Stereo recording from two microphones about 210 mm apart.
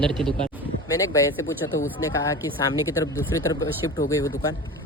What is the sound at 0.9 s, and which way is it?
Speech, 15° left (ahead or behind).